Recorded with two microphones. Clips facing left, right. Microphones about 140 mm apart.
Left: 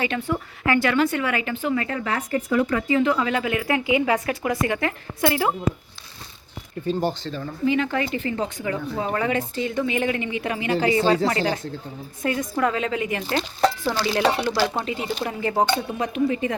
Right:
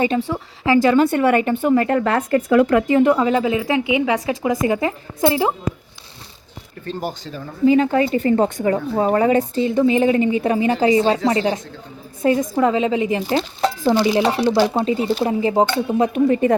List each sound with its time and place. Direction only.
0.1 s a woman's voice: 20° right (ahead or behind)
0.6 s a woman's voice: 30° right (ahead or behind)
1.3 s speech: 45° right (ahead or behind)
3.2 s a woman's voice: 30° right (ahead or behind)
6.8 s speech: 25° left (ahead or behind)
7.3 s speech: 10° right (ahead or behind)
7.6 s a woman's voice: 35° right (ahead or behind); by 14.2 s 20° right (ahead or behind)
14.2 s speech: 5° right (ahead or behind)
14.4 s a woman's voice: 20° right (ahead or behind)
14.7 s a woman's voice: 30° right (ahead or behind)
16.1 s speech: 45° right (ahead or behind)